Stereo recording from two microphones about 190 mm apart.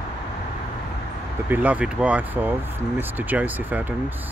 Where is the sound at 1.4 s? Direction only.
10° right (ahead or behind).